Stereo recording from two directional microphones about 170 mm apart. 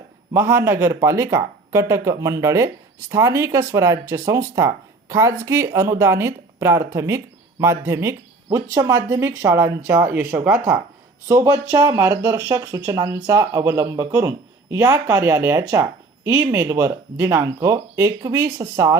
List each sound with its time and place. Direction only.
0.3 s speech: 15° right (ahead or behind)